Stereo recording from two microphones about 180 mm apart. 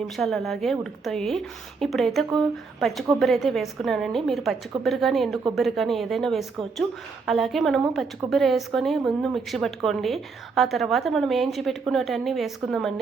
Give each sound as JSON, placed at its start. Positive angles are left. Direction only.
{"t": 0.2, "sound": "a woman's voice", "side_deg": 0}